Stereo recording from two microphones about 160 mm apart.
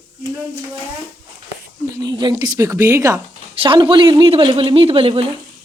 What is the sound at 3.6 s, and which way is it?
Speech, 30° right (ahead or behind).